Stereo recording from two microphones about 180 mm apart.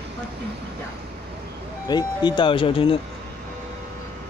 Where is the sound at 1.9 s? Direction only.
25° left (ahead or behind).